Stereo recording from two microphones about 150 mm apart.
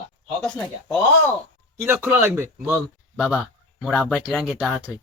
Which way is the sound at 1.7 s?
15° right (ahead or behind).